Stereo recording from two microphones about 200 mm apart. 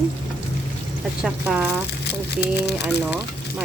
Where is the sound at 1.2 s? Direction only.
5° right (ahead or behind).